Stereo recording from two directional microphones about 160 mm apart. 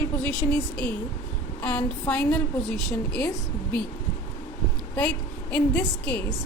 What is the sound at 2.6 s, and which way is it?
Speech, 90° left.